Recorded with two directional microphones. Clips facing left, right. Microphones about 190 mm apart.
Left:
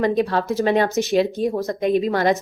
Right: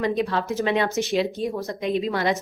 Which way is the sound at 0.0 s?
45° left (ahead or behind).